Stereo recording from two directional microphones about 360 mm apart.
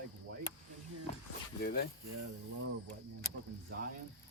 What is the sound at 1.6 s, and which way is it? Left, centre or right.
Speech, left.